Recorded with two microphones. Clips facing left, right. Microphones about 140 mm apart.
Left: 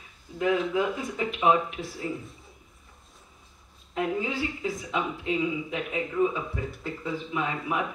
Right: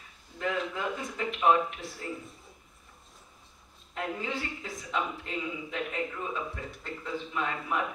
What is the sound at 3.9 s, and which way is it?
Speech, 5° left (ahead or behind).